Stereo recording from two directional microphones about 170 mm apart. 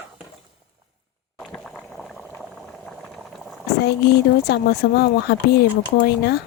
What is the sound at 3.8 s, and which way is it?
Speech, 70° left (ahead or behind).